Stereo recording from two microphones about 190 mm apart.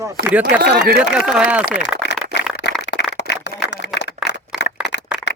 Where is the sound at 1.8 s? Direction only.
70° left (ahead or behind).